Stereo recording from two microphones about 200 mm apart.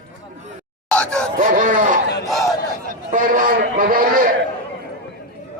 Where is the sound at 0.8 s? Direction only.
5° left (ahead or behind).